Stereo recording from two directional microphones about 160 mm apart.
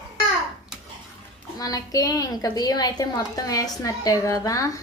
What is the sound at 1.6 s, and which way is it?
Speech, 25° left (ahead or behind).